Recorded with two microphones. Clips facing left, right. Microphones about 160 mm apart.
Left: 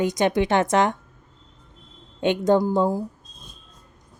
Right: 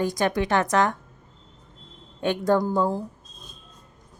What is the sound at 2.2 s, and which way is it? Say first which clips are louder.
Speech: left 3 dB; 20° left (ahead or behind).